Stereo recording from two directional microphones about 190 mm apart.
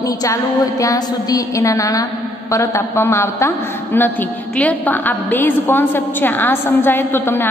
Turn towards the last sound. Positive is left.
turn(degrees=10)  # may be behind; listen again after turning